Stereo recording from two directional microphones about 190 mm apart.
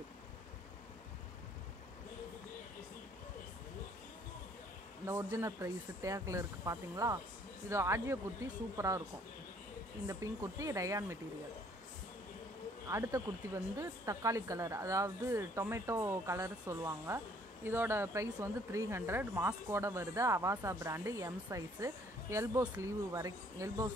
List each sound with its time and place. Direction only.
5.0 s speech: 15° right (ahead or behind)
10.0 s speech: 15° right (ahead or behind)
12.9 s speech: 15° right (ahead or behind)